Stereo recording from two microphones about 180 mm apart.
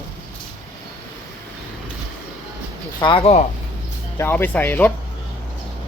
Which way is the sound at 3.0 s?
30° left (ahead or behind).